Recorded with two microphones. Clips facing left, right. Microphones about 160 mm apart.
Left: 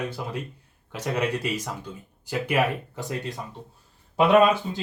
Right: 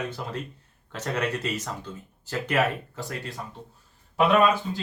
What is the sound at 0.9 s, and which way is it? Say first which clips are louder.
Speech: left 2 dB; 10° left (ahead or behind).